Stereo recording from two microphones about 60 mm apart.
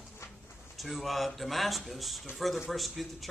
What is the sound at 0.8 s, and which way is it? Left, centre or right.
Speech, centre.